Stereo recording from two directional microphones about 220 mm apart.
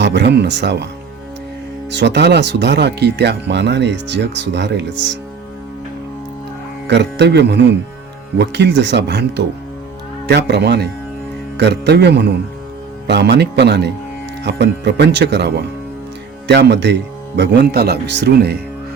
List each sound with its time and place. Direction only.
0.0 s speech: 50° right (ahead or behind)
1.9 s speech: 50° right (ahead or behind)
6.8 s speech: 50° right (ahead or behind)